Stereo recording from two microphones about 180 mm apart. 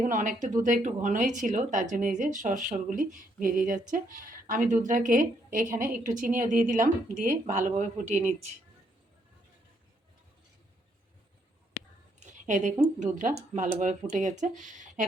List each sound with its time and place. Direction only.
0.0 s a woman's voice: 45° right (ahead or behind)
12.2 s a woman's voice: 40° right (ahead or behind)